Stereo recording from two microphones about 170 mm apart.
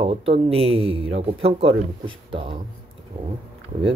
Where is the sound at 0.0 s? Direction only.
35° right (ahead or behind).